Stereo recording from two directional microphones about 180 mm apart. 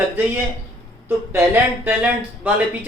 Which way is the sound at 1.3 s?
10° right (ahead or behind).